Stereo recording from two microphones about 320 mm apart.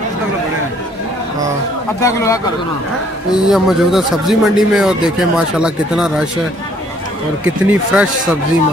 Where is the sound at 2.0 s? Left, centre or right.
Centre.